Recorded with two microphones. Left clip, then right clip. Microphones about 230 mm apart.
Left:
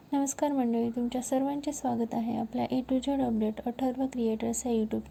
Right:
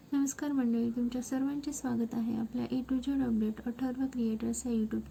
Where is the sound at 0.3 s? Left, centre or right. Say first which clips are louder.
Left 5 dB; centre.